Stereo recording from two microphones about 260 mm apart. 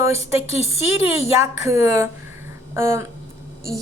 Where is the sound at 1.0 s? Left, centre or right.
Centre.